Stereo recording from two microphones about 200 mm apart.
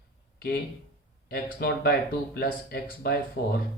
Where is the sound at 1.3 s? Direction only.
50° left (ahead or behind).